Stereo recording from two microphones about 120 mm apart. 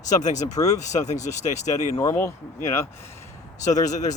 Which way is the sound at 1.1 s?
75° left (ahead or behind).